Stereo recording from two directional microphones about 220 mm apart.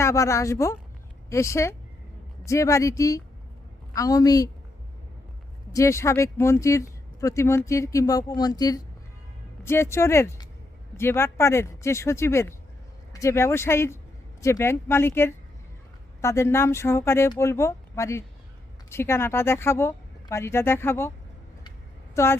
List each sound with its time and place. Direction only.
0.0 s speech: 15° left (ahead or behind)
5.7 s speech: 15° left (ahead or behind)
22.1 s speech: 10° left (ahead or behind)